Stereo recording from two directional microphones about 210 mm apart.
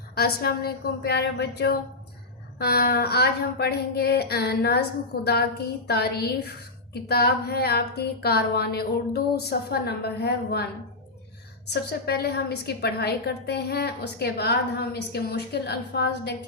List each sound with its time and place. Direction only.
0.2 s a woman's voice: 50° left (ahead or behind)
11.7 s a woman's voice: 50° left (ahead or behind)